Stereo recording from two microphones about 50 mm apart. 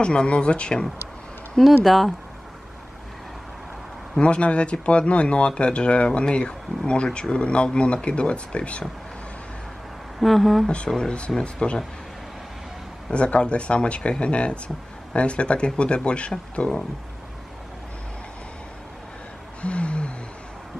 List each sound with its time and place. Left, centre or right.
0.0 s speech: centre
1.6 s speech: centre
4.2 s speech: left
10.2 s speech: centre
10.9 s speech: centre
13.1 s speech: left
19.6 s gasp: left